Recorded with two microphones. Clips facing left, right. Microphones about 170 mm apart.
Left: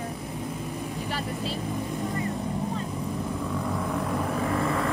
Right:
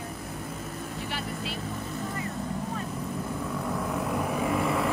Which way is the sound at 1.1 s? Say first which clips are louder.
Left 4 dB; 40° left (ahead or behind).